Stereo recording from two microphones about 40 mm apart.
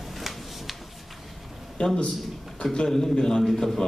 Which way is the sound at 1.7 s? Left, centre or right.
Centre.